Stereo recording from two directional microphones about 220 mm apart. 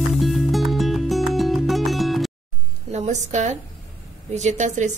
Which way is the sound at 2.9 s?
30° right (ahead or behind).